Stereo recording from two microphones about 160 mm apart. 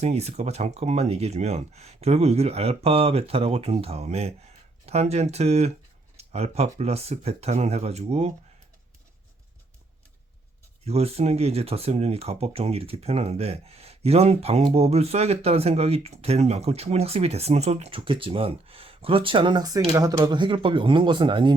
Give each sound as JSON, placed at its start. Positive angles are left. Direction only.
{"t": 0.0, "sound": "speech", "side_deg": -40}
{"t": 10.8, "sound": "speech", "side_deg": -40}